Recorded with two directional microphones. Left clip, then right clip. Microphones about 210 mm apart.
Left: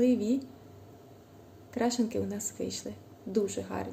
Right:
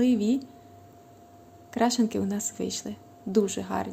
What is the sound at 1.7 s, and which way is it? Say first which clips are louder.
Speech: right 5 dB; 30° right (ahead or behind).